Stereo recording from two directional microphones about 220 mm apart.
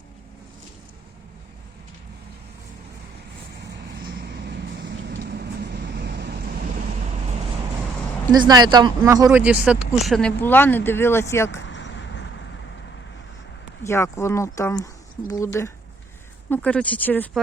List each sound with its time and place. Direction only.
4.2 s vehicle: 50° right (ahead or behind)
8.3 s speech: 20° right (ahead or behind); by 11.6 s 10° left (ahead or behind)
11.7 s vehicle: 55° left (ahead or behind)
13.8 s speech: 10° left (ahead or behind)